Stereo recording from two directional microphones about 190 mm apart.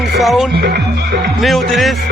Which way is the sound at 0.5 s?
55° right (ahead or behind).